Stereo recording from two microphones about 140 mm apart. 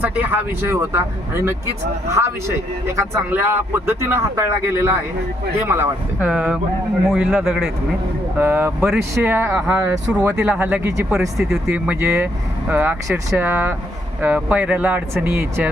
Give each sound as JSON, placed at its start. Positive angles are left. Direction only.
{"t": 0.0, "sound": "a man's voice", "side_deg": -15}
{"t": 11.1, "sound": "a man's voice", "side_deg": 0}
{"t": 11.7, "sound": "speech", "side_deg": -15}